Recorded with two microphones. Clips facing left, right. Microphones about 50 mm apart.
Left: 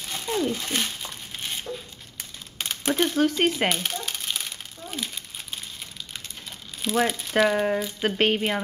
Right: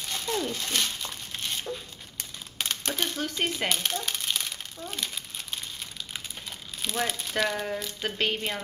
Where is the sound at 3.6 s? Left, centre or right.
Centre.